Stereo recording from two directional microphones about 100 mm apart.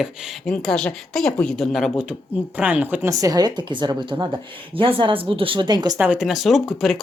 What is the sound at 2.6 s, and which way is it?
Speech, 15° right (ahead or behind).